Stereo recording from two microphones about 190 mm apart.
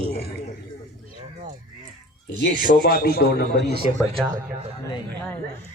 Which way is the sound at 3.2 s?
55° left (ahead or behind).